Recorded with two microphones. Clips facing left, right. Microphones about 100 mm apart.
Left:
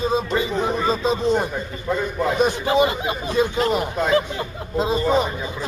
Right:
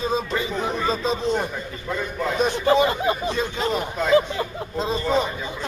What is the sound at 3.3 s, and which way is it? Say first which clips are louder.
A man's voice: left 4 dB; 5° left (ahead or behind).